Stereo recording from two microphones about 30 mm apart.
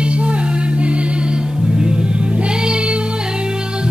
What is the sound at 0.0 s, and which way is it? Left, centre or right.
Music, right.